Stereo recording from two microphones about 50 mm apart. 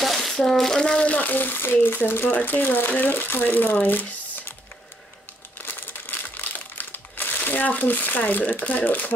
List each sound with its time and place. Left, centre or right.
0.0 s speech: centre; by 3.7 s left
5.7 s crumpling: left